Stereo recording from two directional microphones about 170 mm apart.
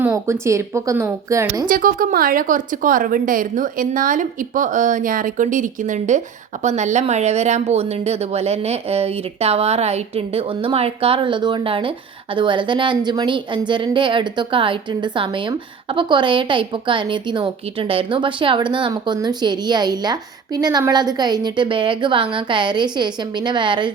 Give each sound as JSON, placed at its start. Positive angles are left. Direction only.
{"t": 0.0, "sound": "speech", "side_deg": -15}
{"t": 1.6, "sound": "a woman's voice", "side_deg": -55}